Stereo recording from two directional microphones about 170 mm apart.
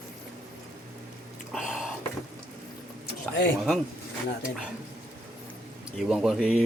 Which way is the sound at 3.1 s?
75° left (ahead or behind).